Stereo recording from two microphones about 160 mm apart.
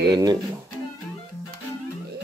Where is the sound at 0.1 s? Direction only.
25° right (ahead or behind).